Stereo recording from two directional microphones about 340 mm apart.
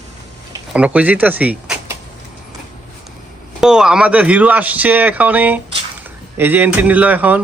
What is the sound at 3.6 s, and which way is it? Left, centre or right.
Speech, centre.